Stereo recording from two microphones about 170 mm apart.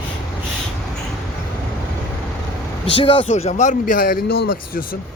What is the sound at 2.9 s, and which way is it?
Speech, 30° left (ahead or behind).